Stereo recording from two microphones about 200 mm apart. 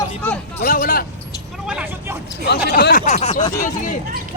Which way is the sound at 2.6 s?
50° left (ahead or behind).